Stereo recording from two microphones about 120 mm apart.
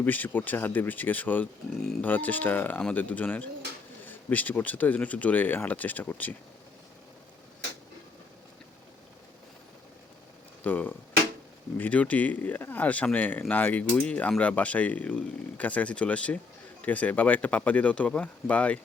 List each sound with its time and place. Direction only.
0.0 s speech: 15° left (ahead or behind)
2.0 s speech: 15° left (ahead or behind)
10.6 s speech: 15° left (ahead or behind)